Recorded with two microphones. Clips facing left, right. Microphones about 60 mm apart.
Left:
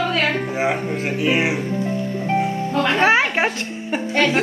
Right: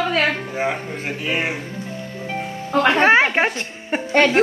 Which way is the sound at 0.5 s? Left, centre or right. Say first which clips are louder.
Left 3 dB; centre.